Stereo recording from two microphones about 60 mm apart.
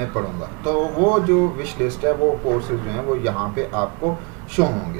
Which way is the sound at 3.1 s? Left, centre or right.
Centre.